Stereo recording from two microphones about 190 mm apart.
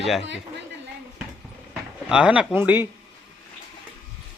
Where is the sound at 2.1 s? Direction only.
5° right (ahead or behind).